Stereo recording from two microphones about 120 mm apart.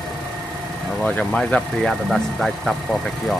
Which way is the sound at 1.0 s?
5° left (ahead or behind).